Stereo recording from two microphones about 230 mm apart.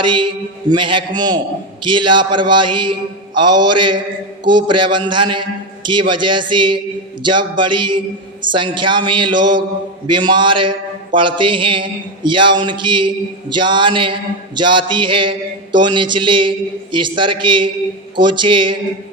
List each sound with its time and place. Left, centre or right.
0.0 s speech: right
3.5 s mantra: right
3.8 s speech: right